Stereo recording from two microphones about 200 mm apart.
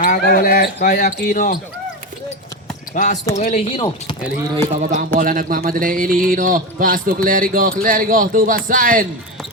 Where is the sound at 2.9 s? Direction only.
40° left (ahead or behind).